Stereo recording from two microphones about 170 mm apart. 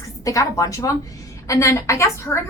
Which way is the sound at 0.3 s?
20° left (ahead or behind).